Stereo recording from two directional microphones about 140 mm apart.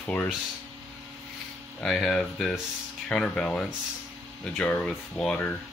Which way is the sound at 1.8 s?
5° left (ahead or behind).